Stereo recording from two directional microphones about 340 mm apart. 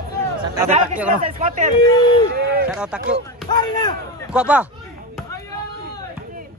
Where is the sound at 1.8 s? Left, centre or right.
Centre.